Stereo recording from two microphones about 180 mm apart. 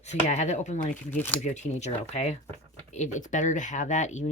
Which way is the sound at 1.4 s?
40° left (ahead or behind).